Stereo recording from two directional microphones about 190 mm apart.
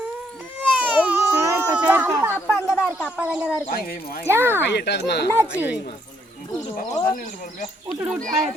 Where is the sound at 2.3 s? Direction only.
10° left (ahead or behind).